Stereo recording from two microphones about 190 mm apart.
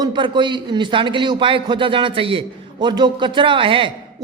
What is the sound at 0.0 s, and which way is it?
A man's voice, 25° right (ahead or behind).